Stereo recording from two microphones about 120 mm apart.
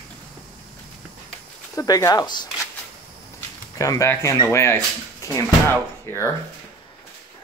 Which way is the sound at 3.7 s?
25° left (ahead or behind).